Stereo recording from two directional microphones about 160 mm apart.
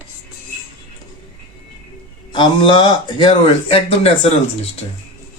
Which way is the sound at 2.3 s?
30° left (ahead or behind).